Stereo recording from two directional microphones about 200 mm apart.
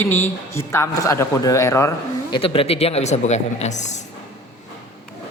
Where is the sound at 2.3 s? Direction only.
30° left (ahead or behind).